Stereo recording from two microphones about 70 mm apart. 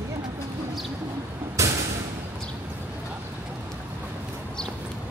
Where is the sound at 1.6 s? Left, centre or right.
Right.